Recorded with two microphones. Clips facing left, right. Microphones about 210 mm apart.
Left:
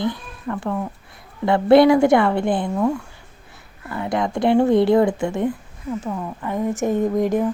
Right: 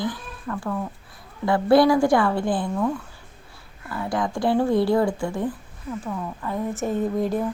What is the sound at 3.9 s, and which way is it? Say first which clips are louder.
Speech: left 3 dB; 20° left (ahead or behind).